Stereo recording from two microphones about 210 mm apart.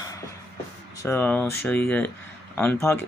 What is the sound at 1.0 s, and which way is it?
Speech, 10° left (ahead or behind).